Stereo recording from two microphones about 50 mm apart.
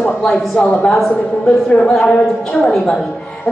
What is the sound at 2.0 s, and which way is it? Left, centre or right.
Speech, left.